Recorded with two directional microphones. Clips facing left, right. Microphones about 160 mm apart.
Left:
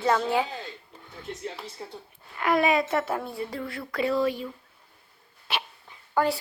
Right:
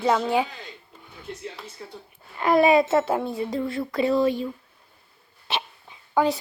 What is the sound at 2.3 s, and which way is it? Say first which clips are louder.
A woman's voice: right 5 dB; 30° right (ahead or behind).